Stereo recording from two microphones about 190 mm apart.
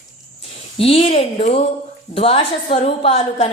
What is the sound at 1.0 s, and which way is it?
A woman's voice, 30° left (ahead or behind).